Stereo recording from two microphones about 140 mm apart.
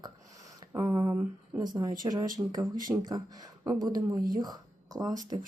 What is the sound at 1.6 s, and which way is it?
Speech, 30° right (ahead or behind).